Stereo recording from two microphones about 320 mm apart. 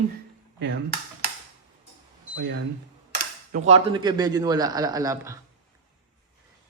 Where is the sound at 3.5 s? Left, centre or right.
Right.